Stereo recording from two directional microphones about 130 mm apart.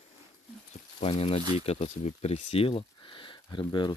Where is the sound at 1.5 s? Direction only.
50° left (ahead or behind).